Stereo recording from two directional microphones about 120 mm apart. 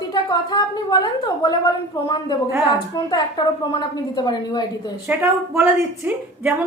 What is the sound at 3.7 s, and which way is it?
Speech, 35° left (ahead or behind).